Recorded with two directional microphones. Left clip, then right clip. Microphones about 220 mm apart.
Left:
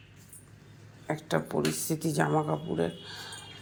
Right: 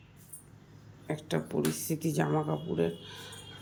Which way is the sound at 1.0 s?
5° right (ahead or behind).